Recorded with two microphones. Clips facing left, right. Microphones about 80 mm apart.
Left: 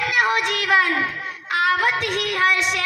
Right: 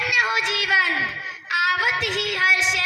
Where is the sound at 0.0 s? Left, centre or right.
Left.